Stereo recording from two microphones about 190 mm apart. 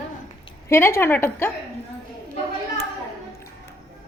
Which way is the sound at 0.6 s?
15° left (ahead or behind).